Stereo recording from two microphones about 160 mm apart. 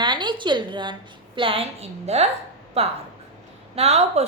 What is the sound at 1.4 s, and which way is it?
A woman's voice, 35° right (ahead or behind).